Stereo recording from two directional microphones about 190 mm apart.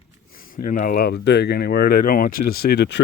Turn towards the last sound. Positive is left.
turn(degrees=65)  # may be behind; listen again after turning